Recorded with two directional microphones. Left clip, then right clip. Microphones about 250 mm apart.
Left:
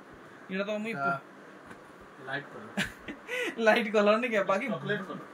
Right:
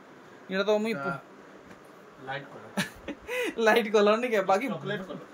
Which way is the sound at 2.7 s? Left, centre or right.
Centre.